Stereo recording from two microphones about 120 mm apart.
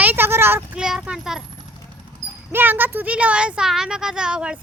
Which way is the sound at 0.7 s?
5° right (ahead or behind).